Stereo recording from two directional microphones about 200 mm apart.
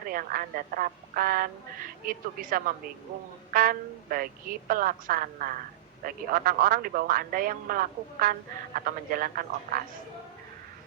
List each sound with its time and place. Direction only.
0.1 s a man's voice: 45° right (ahead or behind)